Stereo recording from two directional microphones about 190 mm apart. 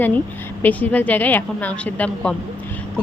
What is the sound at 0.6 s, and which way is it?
A woman's voice, 10° left (ahead or behind).